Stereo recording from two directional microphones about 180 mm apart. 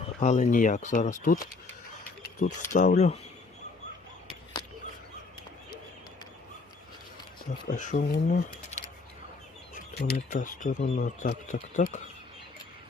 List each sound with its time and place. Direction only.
0.2 s speech: 40° left (ahead or behind)
2.4 s speech: 45° left (ahead or behind)
7.7 s speech: 45° left (ahead or behind)